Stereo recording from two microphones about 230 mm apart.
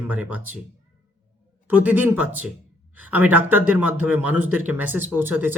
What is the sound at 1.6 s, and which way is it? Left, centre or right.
Speech, centre.